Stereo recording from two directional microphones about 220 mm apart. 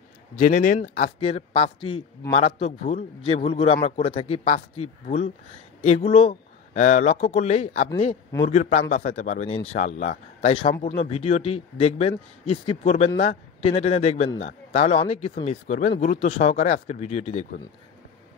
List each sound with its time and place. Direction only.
0.4 s a man's voice: 35° left (ahead or behind)